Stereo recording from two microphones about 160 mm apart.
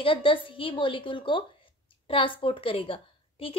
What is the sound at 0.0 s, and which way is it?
A woman's voice, 35° left (ahead or behind).